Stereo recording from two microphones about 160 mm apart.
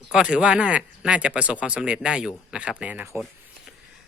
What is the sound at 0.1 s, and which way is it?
Speech, 5° right (ahead or behind).